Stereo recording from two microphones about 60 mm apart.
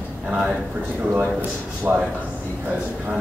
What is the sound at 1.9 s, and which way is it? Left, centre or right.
Speech, centre.